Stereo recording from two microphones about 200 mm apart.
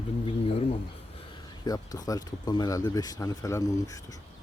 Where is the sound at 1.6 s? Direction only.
20° left (ahead or behind).